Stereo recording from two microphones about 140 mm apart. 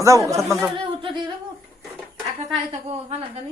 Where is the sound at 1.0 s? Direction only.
35° right (ahead or behind).